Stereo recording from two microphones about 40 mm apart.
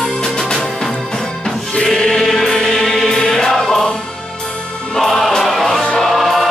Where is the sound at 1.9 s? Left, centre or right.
Centre.